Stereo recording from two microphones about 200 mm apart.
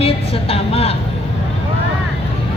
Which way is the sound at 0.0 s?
30° left (ahead or behind).